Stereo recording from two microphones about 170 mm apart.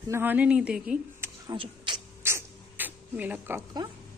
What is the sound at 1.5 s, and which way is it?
Speech, 25° right (ahead or behind).